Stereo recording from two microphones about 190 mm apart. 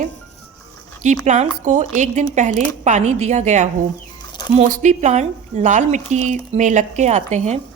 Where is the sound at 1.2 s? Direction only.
40° right (ahead or behind).